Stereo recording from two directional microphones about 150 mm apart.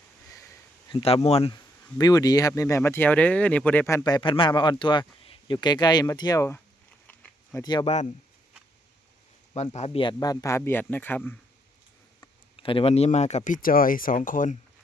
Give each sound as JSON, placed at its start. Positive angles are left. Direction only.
{"t": 0.9, "sound": "speech", "side_deg": 40}
{"t": 2.0, "sound": "speech", "side_deg": 25}
{"t": 7.1, "sound": "a sound", "side_deg": 10}
{"t": 7.6, "sound": "speech", "side_deg": 30}
{"t": 9.7, "sound": "speech", "side_deg": 45}
{"t": 10.0, "sound": "speech", "side_deg": 30}
{"t": 12.5, "sound": "speech", "side_deg": 35}